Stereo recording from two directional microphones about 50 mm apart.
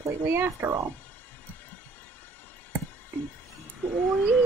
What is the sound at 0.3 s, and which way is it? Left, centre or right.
Speech, right.